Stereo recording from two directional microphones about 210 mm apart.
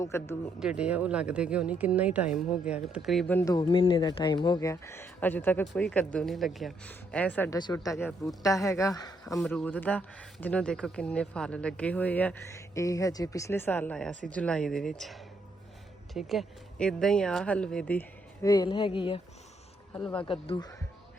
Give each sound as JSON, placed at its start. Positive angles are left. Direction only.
{"t": 0.0, "sound": "speech", "side_deg": 10}
{"t": 0.6, "sound": "speech", "side_deg": -5}
{"t": 9.4, "sound": "speech", "side_deg": 5}
{"t": 18.4, "sound": "speech", "side_deg": 20}